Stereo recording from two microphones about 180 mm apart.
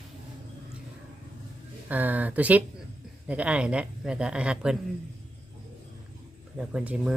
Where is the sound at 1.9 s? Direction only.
10° right (ahead or behind).